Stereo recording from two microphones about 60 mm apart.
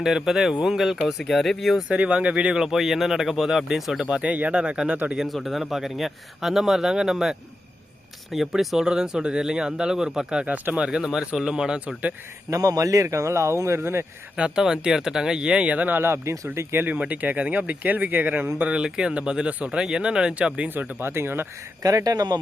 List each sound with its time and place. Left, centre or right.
0.0 s speech: centre
1.9 s speech: right
2.6 s speech: centre
4.1 s speech: centre
5.1 s speech: centre
10.4 s speech: right
10.8 s speech: centre
12.5 s speech: right
14.3 s speech: centre
16.0 s speech: right
16.9 s speech: right
18.6 s speech: centre
20.7 s speech: right
21.8 s speech: right